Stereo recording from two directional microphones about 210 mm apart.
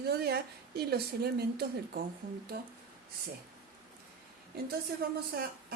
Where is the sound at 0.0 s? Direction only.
50° right (ahead or behind).